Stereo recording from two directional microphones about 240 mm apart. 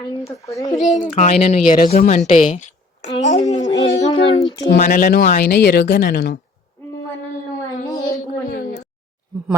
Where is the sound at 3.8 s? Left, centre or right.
Left.